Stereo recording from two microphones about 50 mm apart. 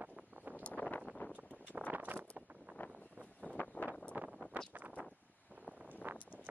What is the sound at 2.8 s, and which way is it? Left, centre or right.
Vehicle, left.